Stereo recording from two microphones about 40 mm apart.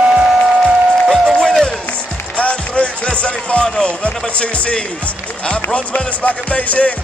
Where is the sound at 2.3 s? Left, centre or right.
Left.